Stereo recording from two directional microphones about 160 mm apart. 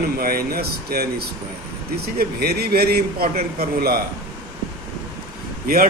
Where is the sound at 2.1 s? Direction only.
80° right.